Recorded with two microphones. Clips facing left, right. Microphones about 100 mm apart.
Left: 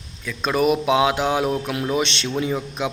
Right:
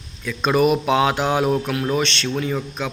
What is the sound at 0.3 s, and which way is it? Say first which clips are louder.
Speech: right 2 dB; centre (ahead or behind).